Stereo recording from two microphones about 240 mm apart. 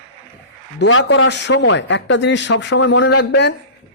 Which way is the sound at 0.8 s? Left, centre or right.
Left.